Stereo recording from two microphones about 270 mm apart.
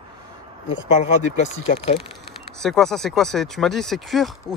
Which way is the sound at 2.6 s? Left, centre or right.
Centre.